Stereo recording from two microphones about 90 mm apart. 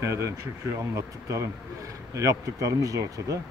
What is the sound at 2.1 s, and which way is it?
Speech, 40° right (ahead or behind).